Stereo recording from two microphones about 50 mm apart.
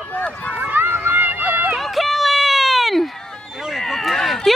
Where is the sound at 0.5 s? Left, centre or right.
Right.